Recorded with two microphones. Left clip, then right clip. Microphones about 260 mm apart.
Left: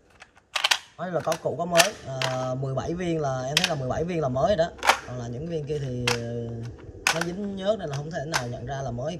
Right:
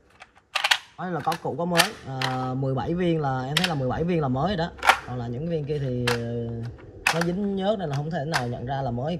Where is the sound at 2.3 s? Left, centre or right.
Right.